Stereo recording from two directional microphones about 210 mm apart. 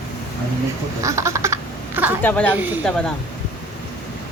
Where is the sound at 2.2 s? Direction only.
10° left (ahead or behind).